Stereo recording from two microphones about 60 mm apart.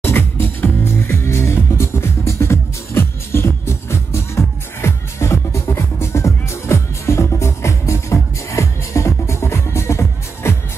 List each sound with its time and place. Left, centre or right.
0.0 s music: left